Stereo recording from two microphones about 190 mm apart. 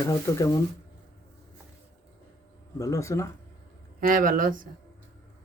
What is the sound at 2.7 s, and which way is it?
Speech, 15° left (ahead or behind).